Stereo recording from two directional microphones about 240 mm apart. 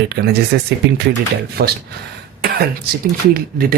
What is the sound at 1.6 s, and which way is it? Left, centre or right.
Speech, right.